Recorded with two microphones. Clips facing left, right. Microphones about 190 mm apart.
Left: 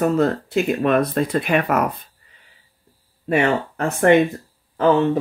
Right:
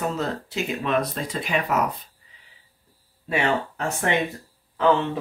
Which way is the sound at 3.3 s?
50° left (ahead or behind).